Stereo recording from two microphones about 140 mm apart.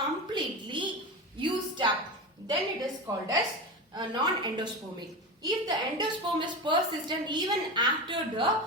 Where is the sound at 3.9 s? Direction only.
30° right (ahead or behind).